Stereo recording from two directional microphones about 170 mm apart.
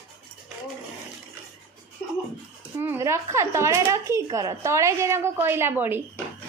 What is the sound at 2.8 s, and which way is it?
Speech, 15° right (ahead or behind).